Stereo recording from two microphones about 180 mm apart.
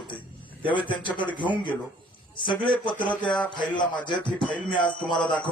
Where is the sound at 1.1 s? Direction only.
25° left (ahead or behind).